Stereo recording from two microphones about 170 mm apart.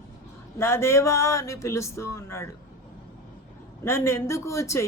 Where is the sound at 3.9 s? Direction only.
15° left (ahead or behind).